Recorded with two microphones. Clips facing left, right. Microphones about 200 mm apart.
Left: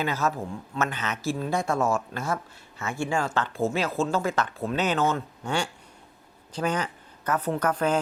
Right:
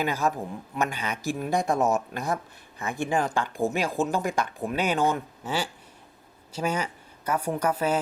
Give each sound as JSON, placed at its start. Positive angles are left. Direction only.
{"t": 0.0, "sound": "a woman's voice", "side_deg": -15}